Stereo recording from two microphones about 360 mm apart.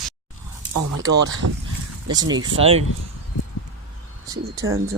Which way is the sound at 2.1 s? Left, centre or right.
Centre.